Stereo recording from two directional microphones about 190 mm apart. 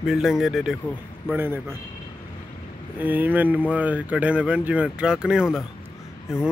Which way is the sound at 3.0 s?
10° right (ahead or behind).